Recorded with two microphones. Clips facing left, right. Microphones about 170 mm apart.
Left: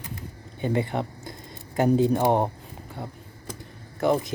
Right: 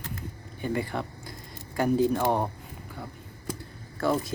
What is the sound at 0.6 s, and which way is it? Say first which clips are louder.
Speech: left 4 dB; 20° left (ahead or behind).